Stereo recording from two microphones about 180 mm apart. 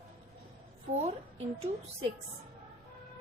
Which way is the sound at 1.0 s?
35° right (ahead or behind).